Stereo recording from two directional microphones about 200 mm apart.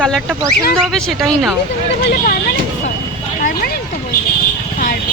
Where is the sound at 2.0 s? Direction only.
50° left (ahead or behind).